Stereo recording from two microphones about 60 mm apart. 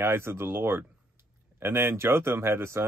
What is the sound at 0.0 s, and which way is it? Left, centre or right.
Speech, right.